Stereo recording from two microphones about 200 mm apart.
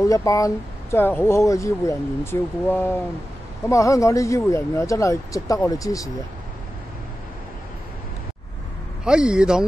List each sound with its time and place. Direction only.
0.0 s speech: 15° left (ahead or behind)
9.0 s speech: 5° right (ahead or behind)